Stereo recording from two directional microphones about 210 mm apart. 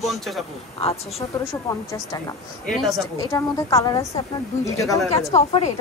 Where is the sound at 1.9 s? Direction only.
15° left (ahead or behind).